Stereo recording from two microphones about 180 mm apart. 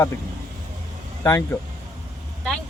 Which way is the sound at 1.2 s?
20° left (ahead or behind).